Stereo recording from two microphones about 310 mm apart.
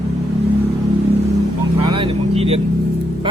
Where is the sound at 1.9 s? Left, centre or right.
Centre.